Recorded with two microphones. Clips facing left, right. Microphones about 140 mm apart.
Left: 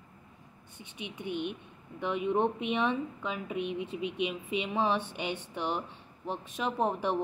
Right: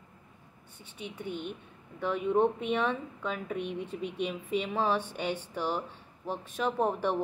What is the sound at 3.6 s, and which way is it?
Speech, 50° right (ahead or behind).